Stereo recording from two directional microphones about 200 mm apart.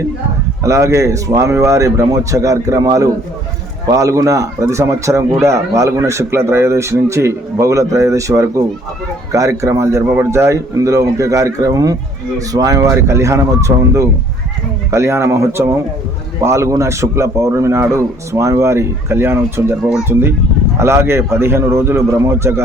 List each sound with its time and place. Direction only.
0.6 s speech: 15° right (ahead or behind)